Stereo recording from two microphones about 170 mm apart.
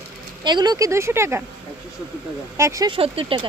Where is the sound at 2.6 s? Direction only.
20° right (ahead or behind).